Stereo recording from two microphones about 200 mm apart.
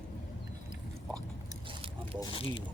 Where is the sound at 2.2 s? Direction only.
25° left (ahead or behind).